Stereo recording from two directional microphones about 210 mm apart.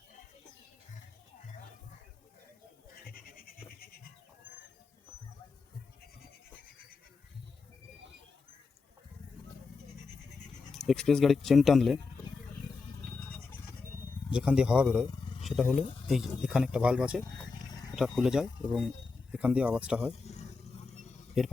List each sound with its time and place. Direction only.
2.9 s goat: 45° left (ahead or behind)
10.7 s speech: centre (ahead or behind)
14.3 s speech: 5° right (ahead or behind)
21.4 s speech: centre (ahead or behind)